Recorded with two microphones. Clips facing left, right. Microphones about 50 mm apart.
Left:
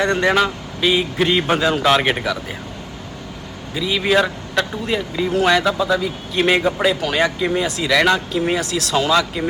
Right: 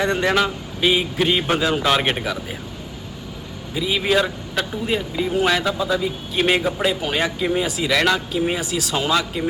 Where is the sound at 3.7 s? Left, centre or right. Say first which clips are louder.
Left 2 dB; centre.